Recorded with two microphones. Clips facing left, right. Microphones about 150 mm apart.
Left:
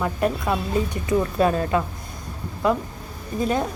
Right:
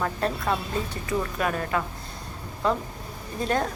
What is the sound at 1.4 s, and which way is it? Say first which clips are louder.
Speech: left 7 dB; 25° left (ahead or behind).